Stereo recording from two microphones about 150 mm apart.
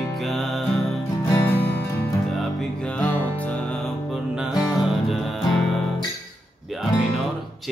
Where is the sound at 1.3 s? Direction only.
15° left (ahead or behind).